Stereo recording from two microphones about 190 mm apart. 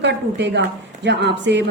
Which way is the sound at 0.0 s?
65° right (ahead or behind).